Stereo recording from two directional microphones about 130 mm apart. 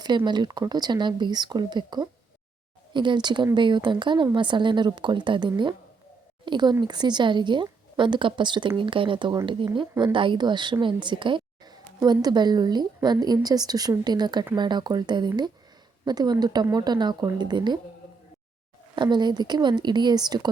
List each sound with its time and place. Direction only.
0.3 s a woman's voice: 35° right (ahead or behind)
18.9 s a woman's voice: 35° right (ahead or behind)